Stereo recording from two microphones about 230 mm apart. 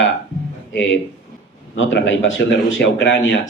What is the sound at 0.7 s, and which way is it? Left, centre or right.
Speech, left.